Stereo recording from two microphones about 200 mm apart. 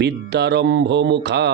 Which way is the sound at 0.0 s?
55° right (ahead or behind).